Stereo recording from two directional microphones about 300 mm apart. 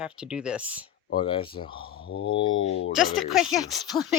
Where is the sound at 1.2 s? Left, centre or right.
Centre.